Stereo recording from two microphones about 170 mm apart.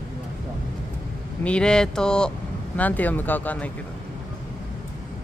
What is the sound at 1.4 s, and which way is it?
Speech, 5° left (ahead or behind).